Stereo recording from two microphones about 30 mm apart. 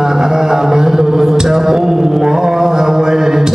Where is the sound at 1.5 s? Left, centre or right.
Centre.